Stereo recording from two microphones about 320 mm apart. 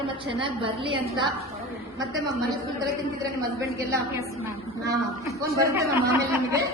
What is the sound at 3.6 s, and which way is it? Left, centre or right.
Speech, centre.